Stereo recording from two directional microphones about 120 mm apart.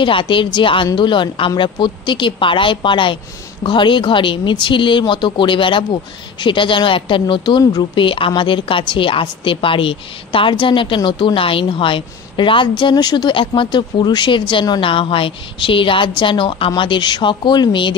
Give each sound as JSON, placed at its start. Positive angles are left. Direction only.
{"t": 0.0, "sound": "a woman's voice", "side_deg": 45}